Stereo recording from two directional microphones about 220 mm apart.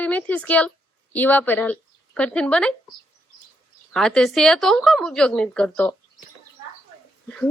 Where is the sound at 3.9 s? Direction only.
Centre (ahead or behind).